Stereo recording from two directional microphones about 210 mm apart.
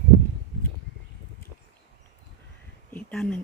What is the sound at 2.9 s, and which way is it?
Speech, 5° left (ahead or behind).